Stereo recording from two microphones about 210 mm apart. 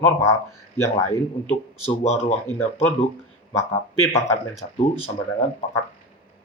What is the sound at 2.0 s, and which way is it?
Speech, 30° left (ahead or behind).